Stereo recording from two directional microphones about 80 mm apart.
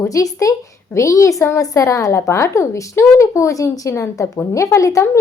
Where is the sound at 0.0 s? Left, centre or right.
Left.